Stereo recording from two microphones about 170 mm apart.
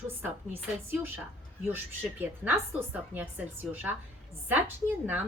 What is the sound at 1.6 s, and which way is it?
A woman's voice, 10° right (ahead or behind).